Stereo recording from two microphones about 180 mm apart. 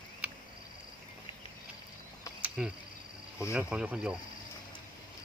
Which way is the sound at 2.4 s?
5° right (ahead or behind).